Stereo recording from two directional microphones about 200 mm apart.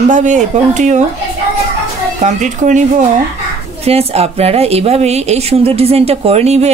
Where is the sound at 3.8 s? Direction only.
30° right (ahead or behind).